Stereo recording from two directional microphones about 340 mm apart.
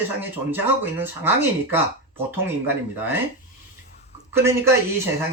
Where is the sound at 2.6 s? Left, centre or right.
Centre.